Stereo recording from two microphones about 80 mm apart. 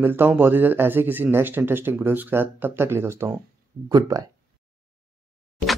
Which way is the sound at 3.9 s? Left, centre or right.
Right.